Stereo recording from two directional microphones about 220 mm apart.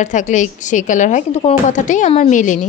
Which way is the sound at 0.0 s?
35° left (ahead or behind).